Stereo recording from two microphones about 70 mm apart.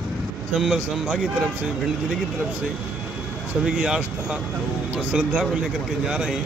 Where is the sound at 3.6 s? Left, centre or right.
Centre.